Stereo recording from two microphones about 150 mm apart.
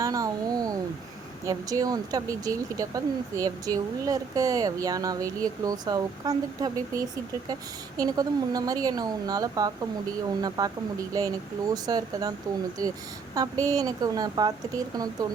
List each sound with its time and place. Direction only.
0.0 s a sound: 25° right (ahead or behind)
1.5 s speech: 25° right (ahead or behind)
13.3 s speech: 25° right (ahead or behind)